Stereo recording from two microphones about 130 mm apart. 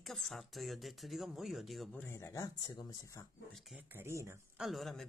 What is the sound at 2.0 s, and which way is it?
Speech, 20° left (ahead or behind).